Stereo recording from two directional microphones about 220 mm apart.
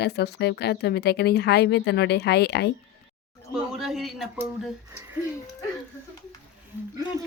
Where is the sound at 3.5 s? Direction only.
Centre (ahead or behind).